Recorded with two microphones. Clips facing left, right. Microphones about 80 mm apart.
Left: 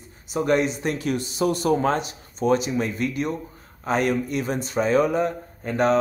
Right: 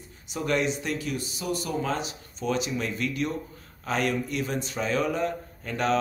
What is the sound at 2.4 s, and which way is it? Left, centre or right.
Speech, left.